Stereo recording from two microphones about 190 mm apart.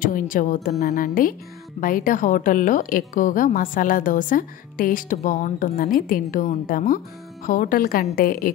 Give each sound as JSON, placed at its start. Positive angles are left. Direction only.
{"t": 0.0, "sound": "a woman's voice", "side_deg": 45}